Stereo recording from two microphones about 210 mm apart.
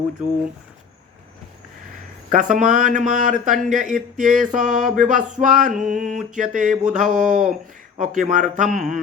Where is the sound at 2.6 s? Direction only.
35° right (ahead or behind).